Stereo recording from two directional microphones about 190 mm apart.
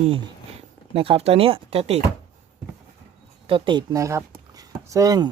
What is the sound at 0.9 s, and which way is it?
Speech, 30° right (ahead or behind).